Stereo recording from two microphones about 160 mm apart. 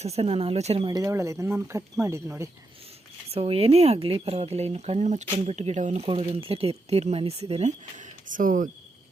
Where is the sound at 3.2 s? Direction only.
40° right (ahead or behind).